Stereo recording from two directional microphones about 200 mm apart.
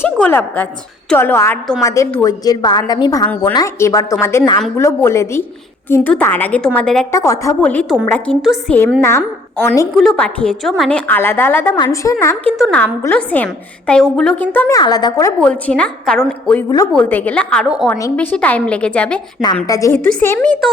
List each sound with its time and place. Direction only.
0.0 s a woman's voice: 10° left (ahead or behind)
7.1 s a woman's voice: 15° left (ahead or behind)
9.0 s a woman's voice: 15° left (ahead or behind)
12.5 s a woman's voice: centre (ahead or behind)
14.8 s a woman's voice: 20° left (ahead or behind)
15.4 s a woman's voice: 5° left (ahead or behind)
16.6 s a woman's voice: 15° left (ahead or behind); by 17.9 s centre (ahead or behind)
17.9 s a woman's voice: 15° left (ahead or behind)
19.6 s a woman's voice: 15° left (ahead or behind)